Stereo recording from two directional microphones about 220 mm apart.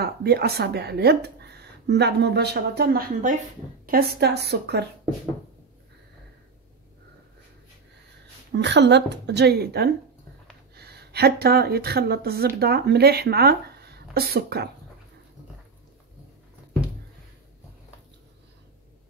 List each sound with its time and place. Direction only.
0.0 s speech: 45° right (ahead or behind)
8.5 s a woman's voice: 50° right (ahead or behind)